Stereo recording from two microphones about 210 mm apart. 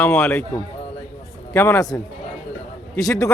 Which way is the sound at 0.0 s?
10° left (ahead or behind).